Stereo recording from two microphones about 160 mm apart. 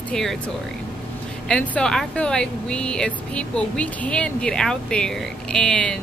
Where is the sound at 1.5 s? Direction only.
10° left (ahead or behind).